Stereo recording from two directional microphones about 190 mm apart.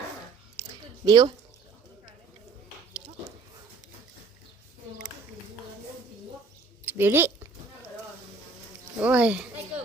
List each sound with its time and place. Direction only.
1.0 s speech: 20° right (ahead or behind)
6.8 s a woman's voice: 10° right (ahead or behind)
9.0 s speech: 10° right (ahead or behind)